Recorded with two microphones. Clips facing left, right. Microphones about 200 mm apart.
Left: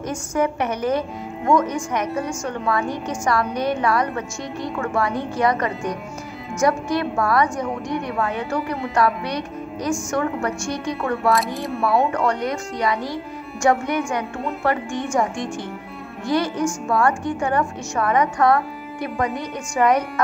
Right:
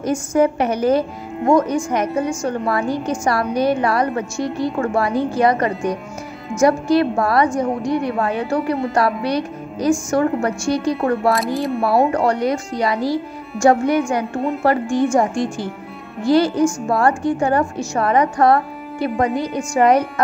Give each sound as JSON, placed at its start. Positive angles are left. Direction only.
{"t": 0.0, "sound": "a woman's voice", "side_deg": -30}
{"t": 11.3, "sound": "speech", "side_deg": 0}
{"t": 11.8, "sound": "a woman's voice", "side_deg": -35}
{"t": 16.3, "sound": "a woman's voice", "side_deg": -30}